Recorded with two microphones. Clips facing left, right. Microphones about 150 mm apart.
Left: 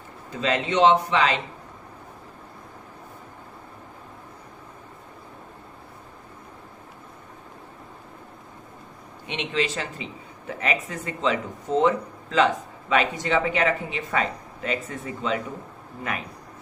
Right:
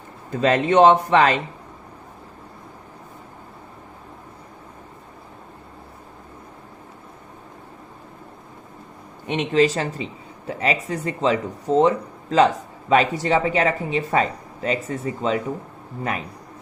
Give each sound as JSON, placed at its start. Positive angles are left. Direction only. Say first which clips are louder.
{"t": 0.3, "sound": "speech", "louder": "right 6 dB", "side_deg": -50}
{"t": 9.2, "sound": "speech", "louder": "right 8 dB", "side_deg": -45}